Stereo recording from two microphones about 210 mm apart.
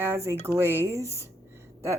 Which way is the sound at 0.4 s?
10° right (ahead or behind).